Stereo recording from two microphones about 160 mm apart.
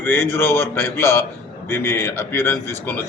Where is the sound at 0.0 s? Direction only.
15° left (ahead or behind).